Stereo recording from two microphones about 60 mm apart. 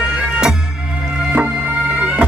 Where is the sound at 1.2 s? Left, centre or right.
Centre.